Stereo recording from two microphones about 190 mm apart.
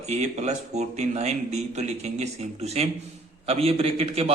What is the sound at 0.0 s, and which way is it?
A man's voice, 35° right (ahead or behind).